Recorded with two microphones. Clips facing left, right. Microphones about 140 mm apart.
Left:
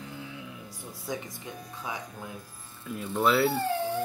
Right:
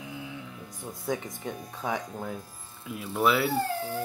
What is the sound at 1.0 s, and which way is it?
Speech, 50° right (ahead or behind).